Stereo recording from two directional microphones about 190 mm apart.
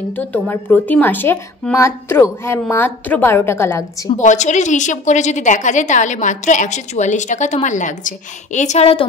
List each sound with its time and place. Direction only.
0.2 s speech: 10° left (ahead or behind)
4.2 s a woman's voice: 40° left (ahead or behind)